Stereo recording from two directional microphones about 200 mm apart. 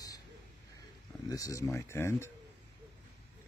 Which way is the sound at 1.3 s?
15° left (ahead or behind).